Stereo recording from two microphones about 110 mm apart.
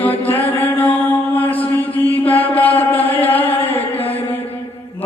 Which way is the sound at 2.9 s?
15° left (ahead or behind).